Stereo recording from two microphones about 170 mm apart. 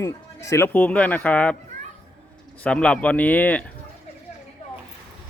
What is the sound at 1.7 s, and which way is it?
Children playing, 45° right (ahead or behind).